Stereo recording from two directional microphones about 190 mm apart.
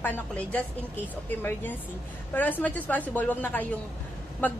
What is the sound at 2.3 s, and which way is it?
A woman's voice, 10° left (ahead or behind).